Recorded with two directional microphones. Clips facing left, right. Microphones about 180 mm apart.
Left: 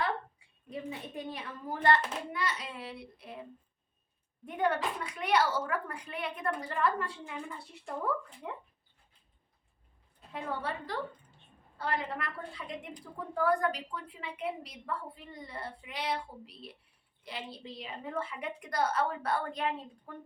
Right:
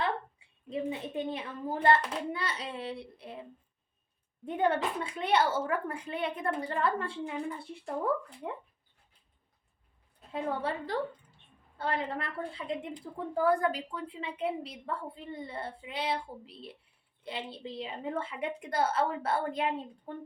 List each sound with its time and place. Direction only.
0.3 s a woman's voice: 25° right (ahead or behind)
4.4 s a woman's voice: 25° right (ahead or behind)
8.4 s a woman's voice: 30° right (ahead or behind)
10.3 s a woman's voice: 30° right (ahead or behind)